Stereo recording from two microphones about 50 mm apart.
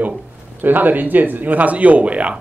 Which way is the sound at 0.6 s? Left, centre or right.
Right.